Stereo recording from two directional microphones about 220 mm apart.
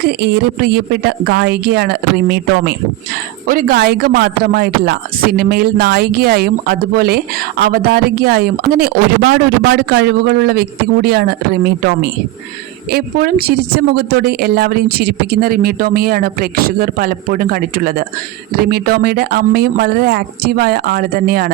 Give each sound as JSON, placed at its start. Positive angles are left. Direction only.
{"t": 0.0, "sound": "speech", "side_deg": -50}